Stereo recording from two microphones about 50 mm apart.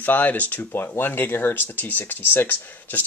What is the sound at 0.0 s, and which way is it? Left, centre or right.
Speech, left.